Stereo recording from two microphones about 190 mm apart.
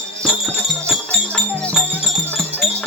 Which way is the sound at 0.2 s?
5° left (ahead or behind).